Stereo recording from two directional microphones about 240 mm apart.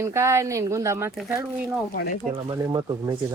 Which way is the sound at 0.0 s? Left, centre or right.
Centre.